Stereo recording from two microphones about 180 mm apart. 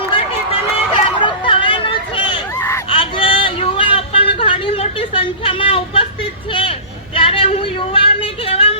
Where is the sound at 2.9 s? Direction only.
30° left (ahead or behind).